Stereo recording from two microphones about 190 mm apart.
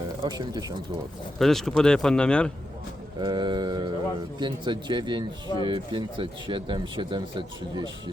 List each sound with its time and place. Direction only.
0.2 s speech: 20° right (ahead or behind)
1.4 s speech: centre (ahead or behind)
3.2 s speech: 25° right (ahead or behind)